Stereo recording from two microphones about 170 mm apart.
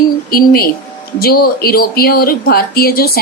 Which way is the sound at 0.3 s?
60° left (ahead or behind).